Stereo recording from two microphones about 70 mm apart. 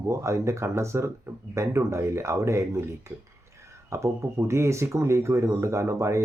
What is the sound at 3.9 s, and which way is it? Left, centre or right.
Speech, right.